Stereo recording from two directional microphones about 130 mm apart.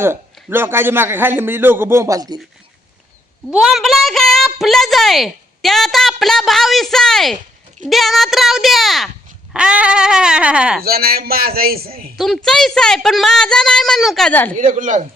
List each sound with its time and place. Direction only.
0.0 s a man's voice: 20° right (ahead or behind)
3.5 s a woman's voice: 5° right (ahead or behind)
12.1 s a woman's voice: centre (ahead or behind)
14.5 s speech: 85° right